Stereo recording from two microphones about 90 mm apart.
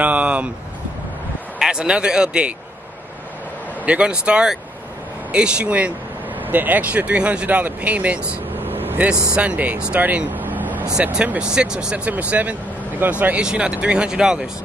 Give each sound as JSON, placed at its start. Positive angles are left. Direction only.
{"t": 0.0, "sound": "vehicle", "side_deg": -15}
{"t": 1.6, "sound": "speech", "side_deg": -10}
{"t": 3.8, "sound": "speech", "side_deg": -15}
{"t": 8.6, "sound": "vehicle", "side_deg": -20}
{"t": 9.3, "sound": "speech", "side_deg": -15}
{"t": 10.9, "sound": "speech", "side_deg": -10}